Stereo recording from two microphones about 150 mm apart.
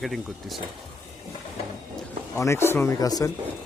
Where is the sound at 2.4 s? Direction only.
15° left (ahead or behind).